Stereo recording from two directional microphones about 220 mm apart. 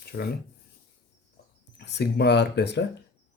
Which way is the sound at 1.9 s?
50° left (ahead or behind).